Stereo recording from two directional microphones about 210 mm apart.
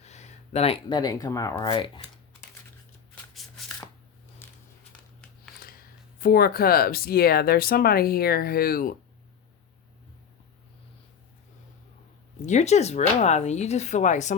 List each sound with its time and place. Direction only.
0.0 s speech: 30° left (ahead or behind)
4.4 s a sound: 10° left (ahead or behind)
6.1 s speech: 45° left (ahead or behind)
12.5 s speech: 35° left (ahead or behind)